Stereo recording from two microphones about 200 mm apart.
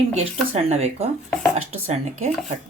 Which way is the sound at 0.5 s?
35° right (ahead or behind).